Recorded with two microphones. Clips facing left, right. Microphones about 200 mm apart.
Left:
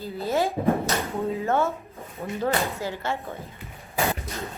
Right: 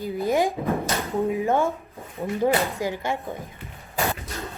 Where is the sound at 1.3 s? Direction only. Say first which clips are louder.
Right 1 dB; 15° right (ahead or behind).